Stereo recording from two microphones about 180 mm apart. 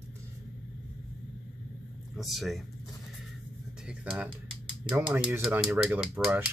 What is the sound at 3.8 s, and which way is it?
Speech, 5° right (ahead or behind).